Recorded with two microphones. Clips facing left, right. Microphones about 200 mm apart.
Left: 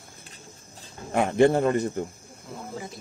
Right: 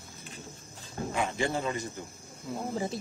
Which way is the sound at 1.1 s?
60° left (ahead or behind).